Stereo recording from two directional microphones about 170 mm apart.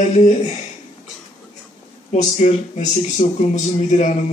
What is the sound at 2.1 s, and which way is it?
Speech, 45° left (ahead or behind).